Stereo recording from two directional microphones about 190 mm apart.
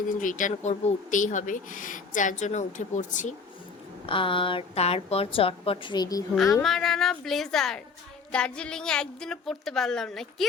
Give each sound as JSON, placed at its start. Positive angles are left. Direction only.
{"t": 0.2, "sound": "speech", "side_deg": 45}
{"t": 4.0, "sound": "a woman's voice", "side_deg": 25}
{"t": 6.3, "sound": "a woman's voice", "side_deg": 0}